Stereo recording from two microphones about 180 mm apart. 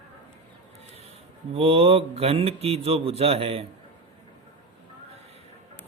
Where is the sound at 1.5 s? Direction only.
35° right (ahead or behind).